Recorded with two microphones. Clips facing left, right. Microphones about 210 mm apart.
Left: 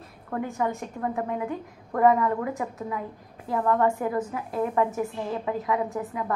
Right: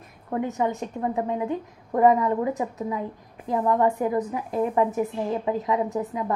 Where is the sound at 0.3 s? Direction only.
20° right (ahead or behind).